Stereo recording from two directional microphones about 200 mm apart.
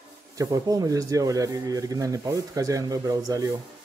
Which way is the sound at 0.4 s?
20° right (ahead or behind).